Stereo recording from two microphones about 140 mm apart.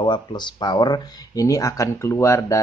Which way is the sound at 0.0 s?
30° left (ahead or behind).